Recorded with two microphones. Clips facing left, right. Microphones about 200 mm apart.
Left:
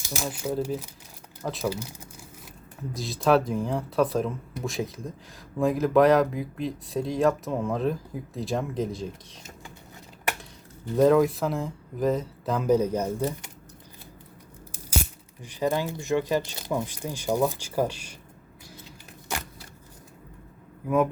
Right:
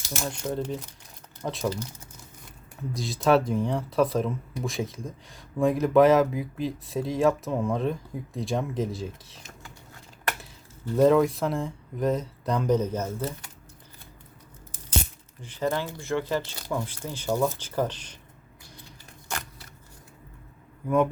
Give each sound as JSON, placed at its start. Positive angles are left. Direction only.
{"t": 0.1, "sound": "speech", "side_deg": 5}
{"t": 2.9, "sound": "speech", "side_deg": 0}
{"t": 10.9, "sound": "speech", "side_deg": 0}
{"t": 14.7, "sound": "speech", "side_deg": 10}
{"t": 20.8, "sound": "speech", "side_deg": 0}